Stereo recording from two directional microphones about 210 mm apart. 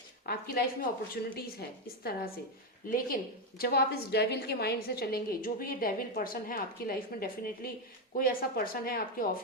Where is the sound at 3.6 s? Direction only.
50° left (ahead or behind).